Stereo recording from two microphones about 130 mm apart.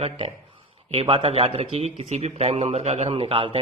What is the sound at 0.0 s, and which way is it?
A man's voice, 45° right (ahead or behind).